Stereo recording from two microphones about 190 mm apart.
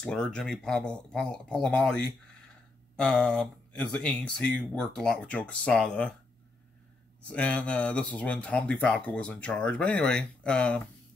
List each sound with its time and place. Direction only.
0.0 s speech: 5° left (ahead or behind)
7.2 s speech: 5° left (ahead or behind)